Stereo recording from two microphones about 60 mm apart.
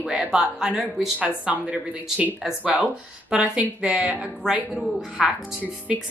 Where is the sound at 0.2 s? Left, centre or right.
Centre.